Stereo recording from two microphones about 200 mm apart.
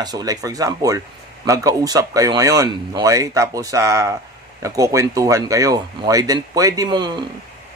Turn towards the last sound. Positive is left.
turn(degrees=-20)  # may be behind; listen again after turning